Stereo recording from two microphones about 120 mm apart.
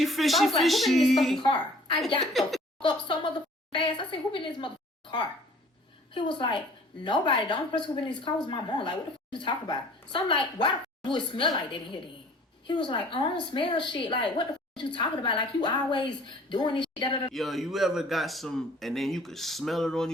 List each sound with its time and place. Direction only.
0.0 s speech: centre (ahead or behind)
1.4 s a woman's voice: 40° left (ahead or behind)
2.2 s speech: centre (ahead or behind)
2.8 s a woman's voice: 40° left (ahead or behind)
6.1 s a woman's voice: 40° left (ahead or behind)
12.6 s a woman's voice: 40° left (ahead or behind)
17.3 s speech: centre (ahead or behind)